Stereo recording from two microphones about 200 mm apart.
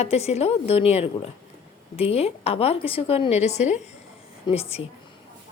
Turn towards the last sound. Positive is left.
turn(degrees=30)  # may be behind; listen again after turning